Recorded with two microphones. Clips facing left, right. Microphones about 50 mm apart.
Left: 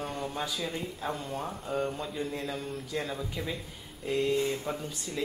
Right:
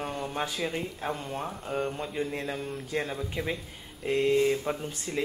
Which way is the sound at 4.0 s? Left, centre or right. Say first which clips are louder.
Right 4 dB; right.